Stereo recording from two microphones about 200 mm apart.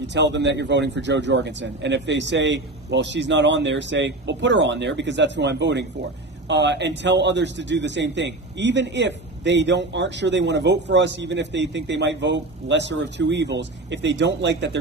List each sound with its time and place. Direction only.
0.0 s a man's voice: 60° right (ahead or behind)